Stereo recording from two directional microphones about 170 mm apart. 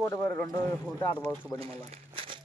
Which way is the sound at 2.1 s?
30° right (ahead or behind).